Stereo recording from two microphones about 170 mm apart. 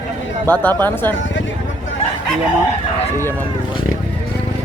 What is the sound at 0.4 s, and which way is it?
Speech, 10° left (ahead or behind).